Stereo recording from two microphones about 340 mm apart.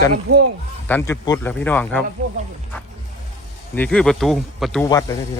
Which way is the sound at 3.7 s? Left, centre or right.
Centre.